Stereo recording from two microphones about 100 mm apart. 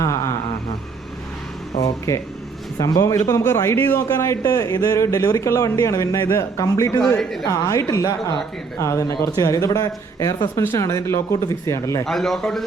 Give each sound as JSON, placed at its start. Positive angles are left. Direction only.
{"t": 1.8, "sound": "a man's voice", "side_deg": 30}
{"t": 7.2, "sound": "a man's voice", "side_deg": 5}
{"t": 7.4, "sound": "a man's voice", "side_deg": 35}
{"t": 12.0, "sound": "a man's voice", "side_deg": 5}